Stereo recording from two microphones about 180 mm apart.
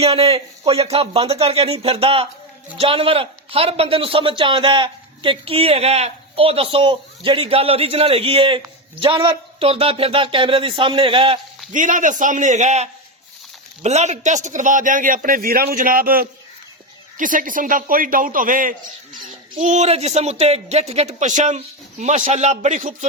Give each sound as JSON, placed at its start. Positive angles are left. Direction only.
{"t": 0.0, "sound": "a man's voice", "side_deg": -35}
{"t": 11.7, "sound": "a man's voice", "side_deg": -45}